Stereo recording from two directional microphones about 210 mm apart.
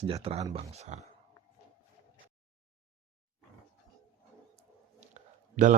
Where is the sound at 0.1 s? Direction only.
25° right (ahead or behind).